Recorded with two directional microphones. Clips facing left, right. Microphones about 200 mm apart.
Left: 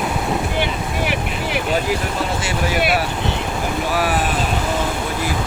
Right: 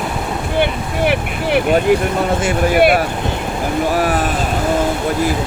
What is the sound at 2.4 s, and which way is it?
Speech, 50° right (ahead or behind).